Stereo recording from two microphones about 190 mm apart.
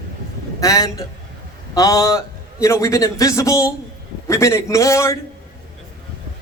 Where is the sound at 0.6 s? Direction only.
15° left (ahead or behind).